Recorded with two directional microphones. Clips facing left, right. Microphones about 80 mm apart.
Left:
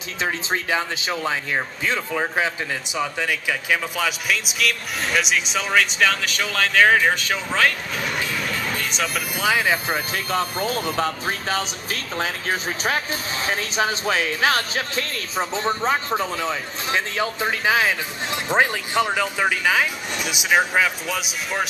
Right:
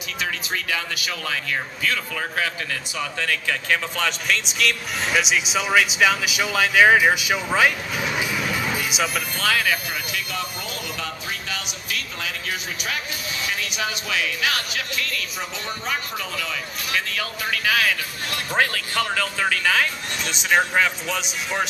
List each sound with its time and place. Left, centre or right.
0.2 s speech: left; by 9.2 s centre
9.4 s speech: centre